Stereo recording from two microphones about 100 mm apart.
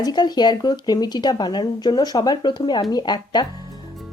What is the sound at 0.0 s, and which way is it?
A woman's voice, 45° left (ahead or behind).